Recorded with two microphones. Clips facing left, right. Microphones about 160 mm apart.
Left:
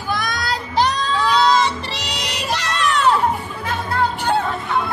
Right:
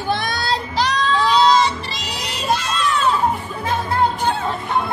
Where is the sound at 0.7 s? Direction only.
50° left (ahead or behind).